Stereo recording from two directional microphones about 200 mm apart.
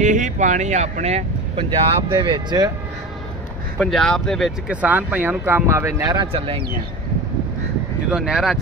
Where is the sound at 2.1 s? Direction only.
20° right (ahead or behind).